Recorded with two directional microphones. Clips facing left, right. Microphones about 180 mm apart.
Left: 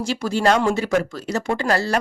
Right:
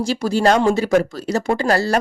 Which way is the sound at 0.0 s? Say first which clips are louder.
Right 3 dB; 35° right (ahead or behind).